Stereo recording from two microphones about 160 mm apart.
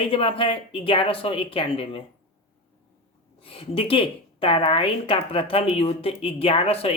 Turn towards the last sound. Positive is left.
turn(degrees=40)  # may be behind; listen again after turning